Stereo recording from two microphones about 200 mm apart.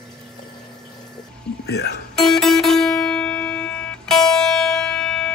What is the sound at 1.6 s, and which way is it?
Speech, 55° left (ahead or behind).